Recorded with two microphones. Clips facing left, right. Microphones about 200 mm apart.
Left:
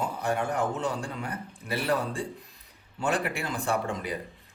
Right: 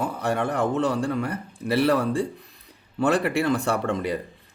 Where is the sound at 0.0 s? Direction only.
60° right (ahead or behind).